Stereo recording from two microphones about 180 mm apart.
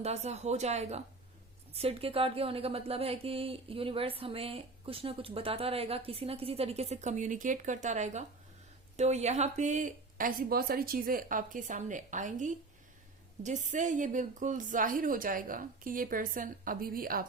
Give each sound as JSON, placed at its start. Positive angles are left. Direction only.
{"t": 0.0, "sound": "speech", "side_deg": -35}